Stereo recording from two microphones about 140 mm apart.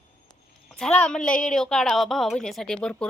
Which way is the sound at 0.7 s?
10° left (ahead or behind).